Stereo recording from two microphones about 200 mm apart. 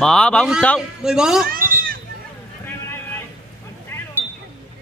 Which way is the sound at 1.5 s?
45° right (ahead or behind).